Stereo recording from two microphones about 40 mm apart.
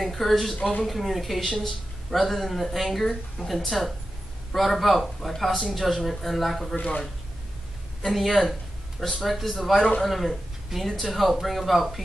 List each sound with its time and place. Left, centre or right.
0.0 s a man's voice: centre
8.0 s a man's voice: centre
9.8 s a man's voice: centre
10.0 s a man's voice: centre